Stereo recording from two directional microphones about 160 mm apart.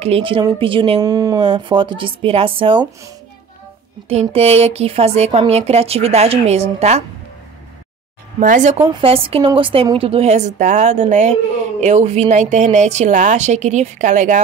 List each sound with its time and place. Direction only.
0.0 s a woman's voice: 35° right (ahead or behind)
1.0 s a woman's voice: 25° right (ahead or behind)
4.1 s a woman's voice: 40° right (ahead or behind)
8.4 s a woman's voice: 50° right (ahead or behind)
9.0 s a woman's voice: 35° right (ahead or behind)